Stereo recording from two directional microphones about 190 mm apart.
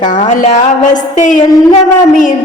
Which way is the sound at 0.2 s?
40° left (ahead or behind).